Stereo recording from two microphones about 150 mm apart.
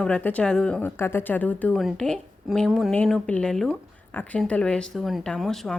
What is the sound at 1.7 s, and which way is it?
A woman's voice, centre (ahead or behind).